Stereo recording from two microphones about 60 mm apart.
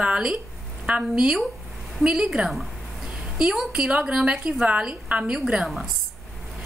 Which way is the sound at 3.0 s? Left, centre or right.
Centre.